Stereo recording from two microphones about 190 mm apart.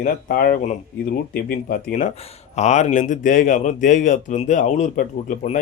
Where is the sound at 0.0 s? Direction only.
45° left (ahead or behind).